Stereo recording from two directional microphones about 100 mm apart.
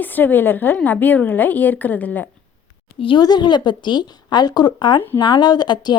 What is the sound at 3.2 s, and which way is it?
Speech, 45° left (ahead or behind).